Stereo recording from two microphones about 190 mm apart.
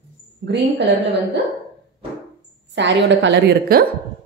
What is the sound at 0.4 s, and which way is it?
Speech, 50° right (ahead or behind).